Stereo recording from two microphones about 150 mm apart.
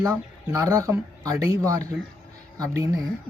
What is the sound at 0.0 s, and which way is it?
Speech, 25° right (ahead or behind).